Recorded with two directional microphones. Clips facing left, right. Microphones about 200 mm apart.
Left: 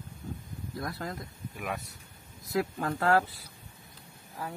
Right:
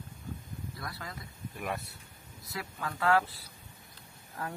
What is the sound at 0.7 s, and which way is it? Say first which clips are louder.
Speech: left 10 dB; 50° left (ahead or behind).